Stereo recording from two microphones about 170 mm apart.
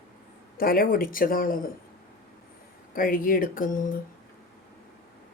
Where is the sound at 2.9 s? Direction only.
55° left (ahead or behind).